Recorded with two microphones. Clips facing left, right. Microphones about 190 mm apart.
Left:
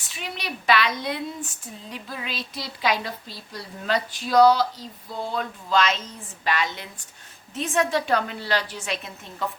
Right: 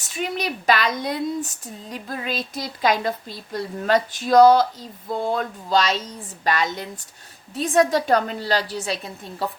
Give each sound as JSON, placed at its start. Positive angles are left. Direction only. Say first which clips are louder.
{"t": 0.1, "sound": "a woman's voice", "louder": "right 8 dB", "side_deg": -45}